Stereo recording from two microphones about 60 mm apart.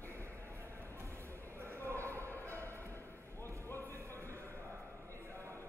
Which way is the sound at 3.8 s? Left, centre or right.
Right.